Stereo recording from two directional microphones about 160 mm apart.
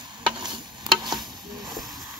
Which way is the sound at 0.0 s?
30° right (ahead or behind).